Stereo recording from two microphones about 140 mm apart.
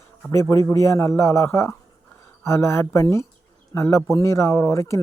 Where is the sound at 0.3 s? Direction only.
20° left (ahead or behind).